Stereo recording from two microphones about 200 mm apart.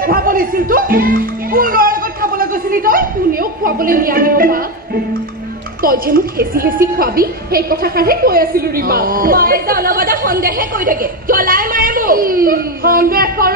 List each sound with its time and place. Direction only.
0.0 s a child's voice: 45° right (ahead or behind)
5.8 s a woman's voice: 45° right (ahead or behind)